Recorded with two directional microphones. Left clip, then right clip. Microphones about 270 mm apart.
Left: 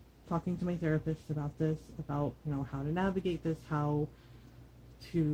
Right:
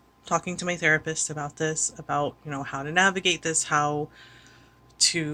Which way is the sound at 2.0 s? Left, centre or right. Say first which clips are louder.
Right 9 dB; right.